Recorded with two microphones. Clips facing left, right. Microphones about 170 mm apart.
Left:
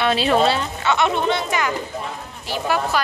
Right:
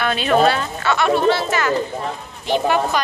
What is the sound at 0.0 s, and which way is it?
A woman's voice, 25° left (ahead or behind).